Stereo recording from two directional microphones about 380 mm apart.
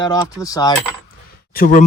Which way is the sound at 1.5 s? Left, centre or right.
Left.